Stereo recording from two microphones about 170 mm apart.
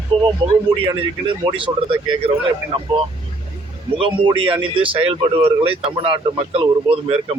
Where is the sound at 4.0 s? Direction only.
30° right (ahead or behind).